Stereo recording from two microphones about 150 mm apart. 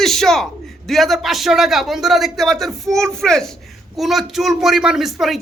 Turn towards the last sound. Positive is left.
turn(degrees=0)  # may be behind; listen again after turning